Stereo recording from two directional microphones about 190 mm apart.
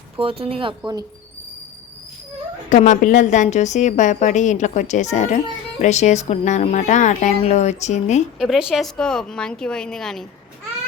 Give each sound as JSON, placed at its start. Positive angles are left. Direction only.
{"t": 0.2, "sound": "speech", "side_deg": -30}
{"t": 2.6, "sound": "a woman's voice", "side_deg": 40}
{"t": 8.4, "sound": "speech", "side_deg": -5}